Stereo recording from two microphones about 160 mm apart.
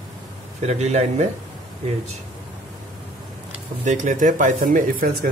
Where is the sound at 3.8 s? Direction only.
55° right (ahead or behind).